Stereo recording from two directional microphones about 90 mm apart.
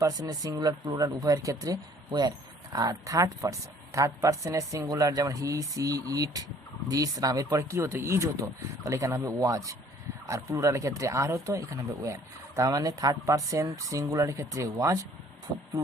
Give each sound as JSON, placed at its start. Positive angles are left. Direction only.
{"t": 0.0, "sound": "speech", "side_deg": -45}